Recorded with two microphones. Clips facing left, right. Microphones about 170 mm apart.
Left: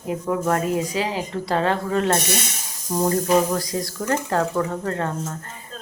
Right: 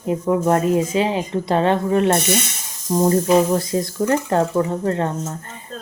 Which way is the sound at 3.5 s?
25° right (ahead or behind).